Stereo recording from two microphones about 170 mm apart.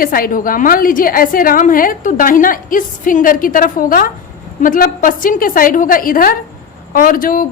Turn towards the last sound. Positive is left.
turn(degrees=55)  # may be behind; listen again after turning